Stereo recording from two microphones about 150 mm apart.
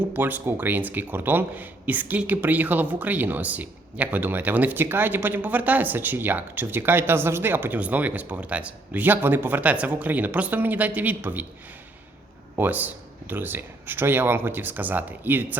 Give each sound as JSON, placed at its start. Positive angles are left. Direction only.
{"t": 0.1, "sound": "speech", "side_deg": -10}
{"t": 12.5, "sound": "speech", "side_deg": -10}